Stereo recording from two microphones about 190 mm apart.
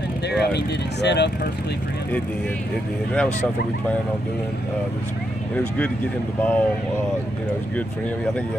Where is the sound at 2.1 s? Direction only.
5° left (ahead or behind).